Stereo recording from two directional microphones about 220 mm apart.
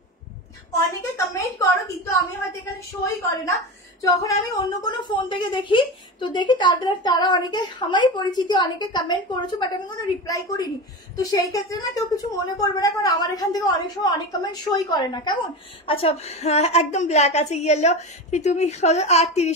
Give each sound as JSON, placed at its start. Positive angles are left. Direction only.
{"t": 0.7, "sound": "a woman's voice", "side_deg": 15}